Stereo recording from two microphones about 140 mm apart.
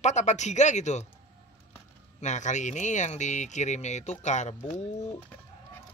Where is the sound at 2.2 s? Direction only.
60° left (ahead or behind).